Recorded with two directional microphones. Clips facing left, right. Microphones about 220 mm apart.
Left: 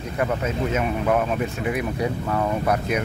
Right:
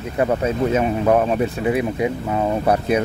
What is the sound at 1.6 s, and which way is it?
Speech, 25° right (ahead or behind).